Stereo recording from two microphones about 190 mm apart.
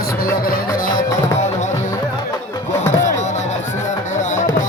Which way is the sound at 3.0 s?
40° left (ahead or behind).